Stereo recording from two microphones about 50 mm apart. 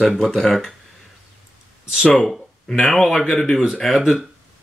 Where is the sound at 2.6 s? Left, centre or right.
Centre.